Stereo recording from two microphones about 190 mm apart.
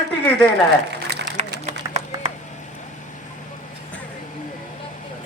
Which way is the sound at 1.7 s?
35° right (ahead or behind).